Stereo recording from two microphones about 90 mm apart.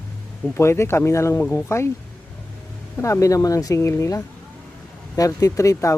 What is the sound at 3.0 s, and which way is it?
Speech, 35° left (ahead or behind).